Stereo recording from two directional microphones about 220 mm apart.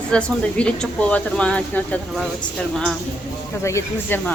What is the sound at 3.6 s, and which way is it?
Speech, 10° left (ahead or behind).